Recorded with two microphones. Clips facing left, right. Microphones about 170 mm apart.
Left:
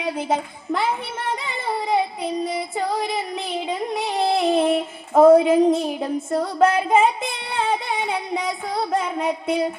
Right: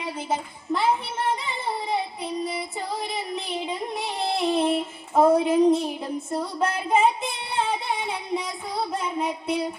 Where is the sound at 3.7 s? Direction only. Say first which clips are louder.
Left 5 dB; 90° left.